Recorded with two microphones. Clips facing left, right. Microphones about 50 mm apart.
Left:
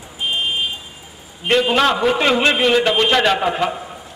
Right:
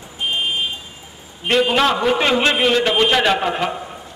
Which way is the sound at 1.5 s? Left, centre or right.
Centre.